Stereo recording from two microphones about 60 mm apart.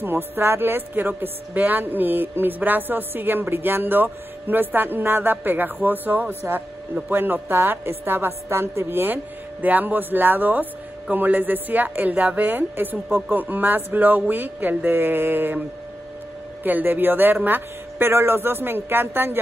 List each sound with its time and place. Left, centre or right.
0.0 s a woman's voice: right
16.6 s a woman's voice: right